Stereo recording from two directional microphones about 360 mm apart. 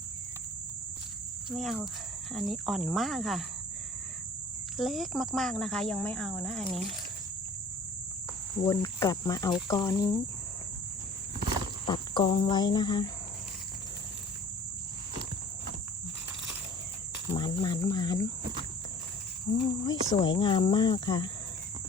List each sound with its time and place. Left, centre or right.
1.5 s speech: centre
4.8 s speech: centre
8.6 s speech: centre
11.9 s speech: centre
17.3 s speech: centre
19.6 s speech: centre